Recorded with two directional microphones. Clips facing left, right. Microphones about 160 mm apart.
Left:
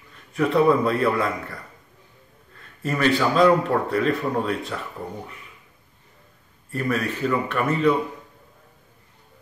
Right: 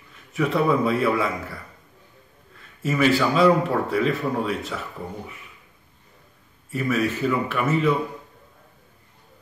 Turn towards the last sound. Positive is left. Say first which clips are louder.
# left 1 dB
turn(degrees=-5)  # may be behind; listen again after turning